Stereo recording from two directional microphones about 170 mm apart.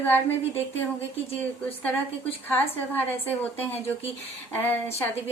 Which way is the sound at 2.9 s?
10° left (ahead or behind).